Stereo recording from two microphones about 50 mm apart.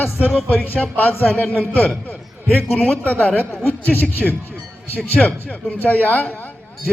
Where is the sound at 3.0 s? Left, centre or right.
Left.